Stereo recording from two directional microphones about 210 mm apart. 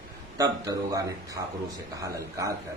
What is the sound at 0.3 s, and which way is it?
Speech, 15° right (ahead or behind).